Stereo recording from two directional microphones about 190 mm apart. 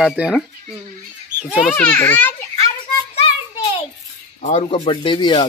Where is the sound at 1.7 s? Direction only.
10° left (ahead or behind).